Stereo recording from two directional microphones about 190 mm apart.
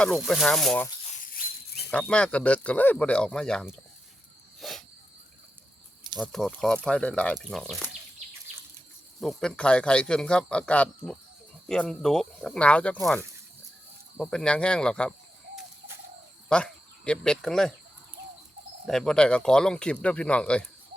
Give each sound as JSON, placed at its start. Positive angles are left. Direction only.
{"t": 0.0, "sound": "speech", "side_deg": 0}
{"t": 1.2, "sound": "a sound", "side_deg": 50}
{"t": 1.9, "sound": "speech", "side_deg": 5}
{"t": 4.6, "sound": "a sound", "side_deg": 0}
{"t": 6.1, "sound": "speech", "side_deg": 0}
{"t": 9.2, "sound": "speech", "side_deg": 5}
{"t": 14.2, "sound": "speech", "side_deg": 5}
{"t": 16.5, "sound": "speech", "side_deg": 5}
{"t": 18.9, "sound": "speech", "side_deg": 5}